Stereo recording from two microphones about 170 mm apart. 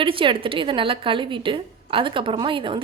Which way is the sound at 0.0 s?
30° right (ahead or behind).